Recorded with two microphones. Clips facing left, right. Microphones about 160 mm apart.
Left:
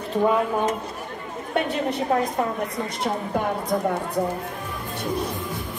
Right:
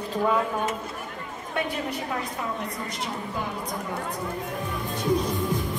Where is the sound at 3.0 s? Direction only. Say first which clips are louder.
Left 8 dB; 60° left (ahead or behind).